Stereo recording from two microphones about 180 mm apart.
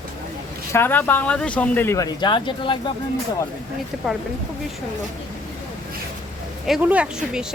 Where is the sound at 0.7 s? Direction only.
10° left (ahead or behind); by 2.8 s 25° left (ahead or behind).